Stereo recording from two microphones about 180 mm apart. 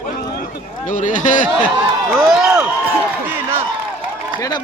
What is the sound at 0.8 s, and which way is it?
Speech, 45° left (ahead or behind).